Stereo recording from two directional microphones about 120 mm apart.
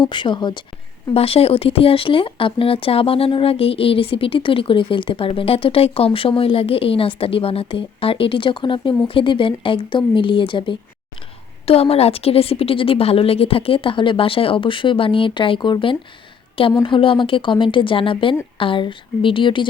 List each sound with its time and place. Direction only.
0.0 s speech: 40° left (ahead or behind)
1.1 s speech: 55° left (ahead or behind)
11.6 s speech: 55° left (ahead or behind)